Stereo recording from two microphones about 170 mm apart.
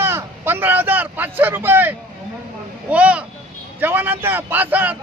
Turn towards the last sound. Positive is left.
turn(degrees=-10)  # may be behind; listen again after turning